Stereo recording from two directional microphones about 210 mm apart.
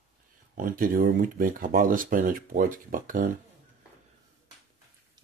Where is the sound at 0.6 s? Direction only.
40° right (ahead or behind).